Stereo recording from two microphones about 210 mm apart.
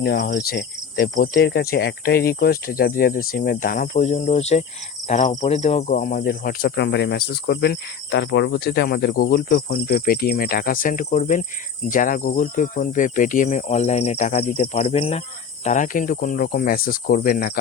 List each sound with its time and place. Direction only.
0.0 s speech: 50° left (ahead or behind); by 4.6 s 30° left (ahead or behind)
5.0 s cricket: 35° left (ahead or behind)
5.5 s speech: 35° left (ahead or behind)